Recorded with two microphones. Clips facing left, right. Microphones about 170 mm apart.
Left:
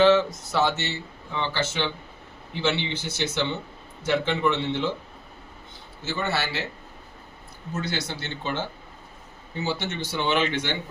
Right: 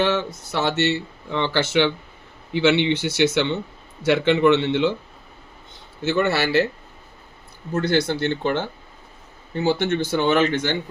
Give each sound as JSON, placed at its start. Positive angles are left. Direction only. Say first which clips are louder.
{"t": 0.5, "sound": "speech", "louder": "right 4 dB", "side_deg": -70}
{"t": 6.0, "sound": "speech", "louder": "right 8 dB", "side_deg": -65}
{"t": 7.7, "sound": "speech", "louder": "right 10 dB", "side_deg": -55}
{"t": 9.6, "sound": "speech", "louder": "right 8 dB", "side_deg": -55}